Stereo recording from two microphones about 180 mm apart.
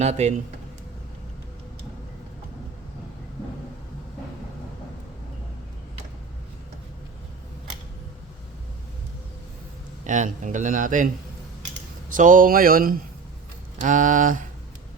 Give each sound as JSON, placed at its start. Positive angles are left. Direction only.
{"t": 0.0, "sound": "speech", "side_deg": -35}
{"t": 10.0, "sound": "a man's voice", "side_deg": -45}
{"t": 12.1, "sound": "a man's voice", "side_deg": -45}